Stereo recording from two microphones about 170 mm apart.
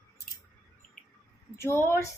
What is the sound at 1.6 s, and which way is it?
Speech, 15° left (ahead or behind).